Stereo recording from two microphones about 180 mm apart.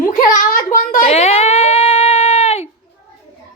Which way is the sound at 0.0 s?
50° left (ahead or behind).